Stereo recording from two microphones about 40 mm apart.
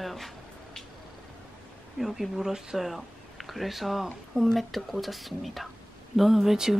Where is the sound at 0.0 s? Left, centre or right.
Centre.